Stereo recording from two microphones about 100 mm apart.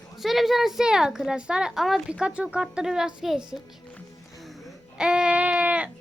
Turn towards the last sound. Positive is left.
turn(degrees=-15)  # may be behind; listen again after turning